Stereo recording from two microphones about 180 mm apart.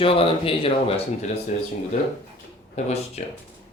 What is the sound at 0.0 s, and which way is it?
Speech, 30° left (ahead or behind).